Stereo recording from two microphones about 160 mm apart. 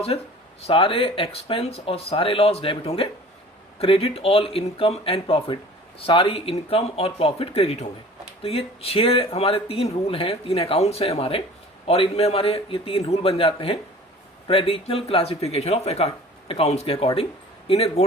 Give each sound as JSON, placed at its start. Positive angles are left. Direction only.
{"t": 0.1, "sound": "speech", "side_deg": 35}